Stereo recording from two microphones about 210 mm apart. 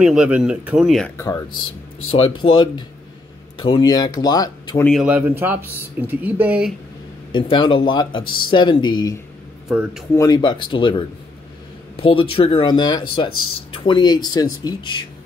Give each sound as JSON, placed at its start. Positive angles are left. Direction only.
{"t": 0.0, "sound": "speech", "side_deg": -5}
{"t": 1.1, "sound": "speech", "side_deg": 15}
{"t": 2.0, "sound": "speech", "side_deg": 25}
{"t": 4.8, "sound": "a man's voice", "side_deg": -5}
{"t": 7.3, "sound": "speech", "side_deg": 25}
{"t": 9.7, "sound": "speech", "side_deg": 0}
{"t": 10.1, "sound": "speech", "side_deg": 20}